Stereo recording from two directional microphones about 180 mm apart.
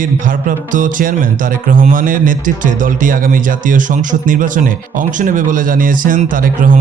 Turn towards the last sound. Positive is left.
turn(degrees=-50)  # may be behind; listen again after turning